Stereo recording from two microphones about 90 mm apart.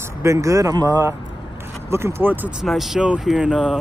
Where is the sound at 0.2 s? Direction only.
35° right (ahead or behind).